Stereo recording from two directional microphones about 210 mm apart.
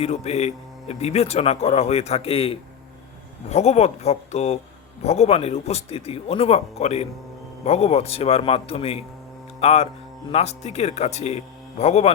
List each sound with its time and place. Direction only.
0.0 s speech: 30° left (ahead or behind)